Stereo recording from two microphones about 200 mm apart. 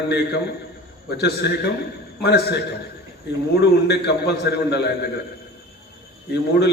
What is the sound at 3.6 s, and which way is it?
A man's voice, 55° left (ahead or behind).